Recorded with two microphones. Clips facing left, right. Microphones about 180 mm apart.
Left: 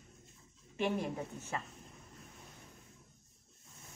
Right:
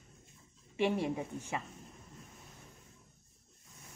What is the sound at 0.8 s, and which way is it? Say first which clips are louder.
Speech: right 3 dB; 15° right (ahead or behind).